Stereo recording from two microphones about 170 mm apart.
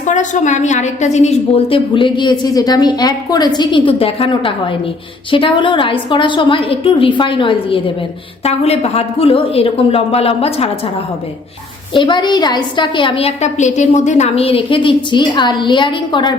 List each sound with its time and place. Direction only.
0.0 s a woman's voice: 45° left (ahead or behind)
11.9 s a woman's voice: 30° left (ahead or behind)